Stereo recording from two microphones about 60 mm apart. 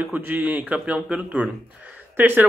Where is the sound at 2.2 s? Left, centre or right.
Right.